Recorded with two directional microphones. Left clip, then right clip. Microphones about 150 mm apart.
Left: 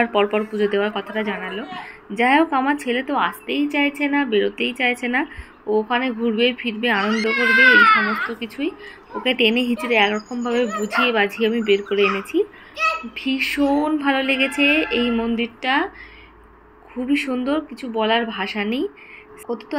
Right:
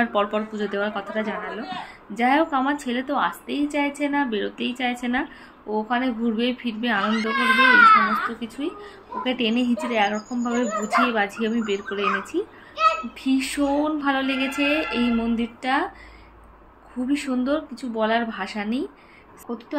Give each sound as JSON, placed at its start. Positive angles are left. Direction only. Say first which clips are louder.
{"t": 0.0, "sound": "a child's voice", "louder": "left 4 dB", "side_deg": 20}
{"t": 17.1, "sound": "a child's voice", "louder": "left 3 dB", "side_deg": 20}
{"t": 19.4, "sound": "speech", "louder": "left 4 dB", "side_deg": 35}